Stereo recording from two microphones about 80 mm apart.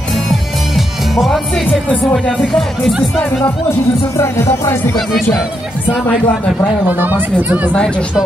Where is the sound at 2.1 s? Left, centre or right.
Centre.